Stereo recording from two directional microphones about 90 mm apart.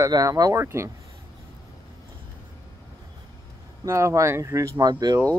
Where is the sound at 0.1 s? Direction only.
40° right (ahead or behind).